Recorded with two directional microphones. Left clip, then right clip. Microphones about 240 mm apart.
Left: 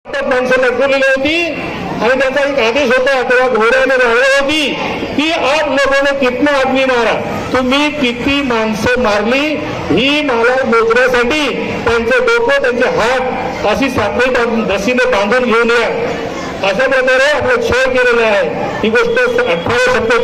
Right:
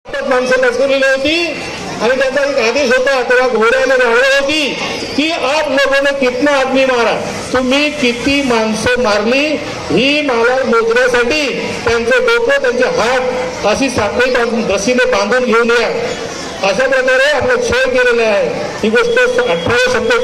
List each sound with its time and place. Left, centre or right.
0.3 s a man's voice: right
2.6 s a man's voice: right